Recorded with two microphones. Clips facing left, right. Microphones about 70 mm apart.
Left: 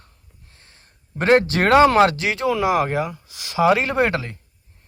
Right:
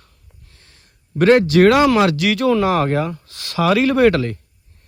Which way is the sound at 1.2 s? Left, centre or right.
Left.